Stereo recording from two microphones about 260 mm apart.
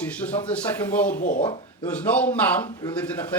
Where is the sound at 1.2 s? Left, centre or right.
Left.